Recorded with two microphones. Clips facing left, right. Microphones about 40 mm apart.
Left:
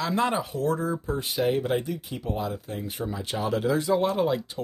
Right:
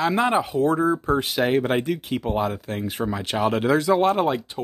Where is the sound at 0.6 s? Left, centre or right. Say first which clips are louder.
Right 7 dB; right.